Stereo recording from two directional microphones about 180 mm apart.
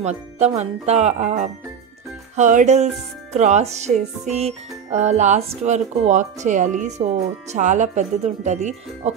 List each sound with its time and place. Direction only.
0.6 s music: 40° right (ahead or behind)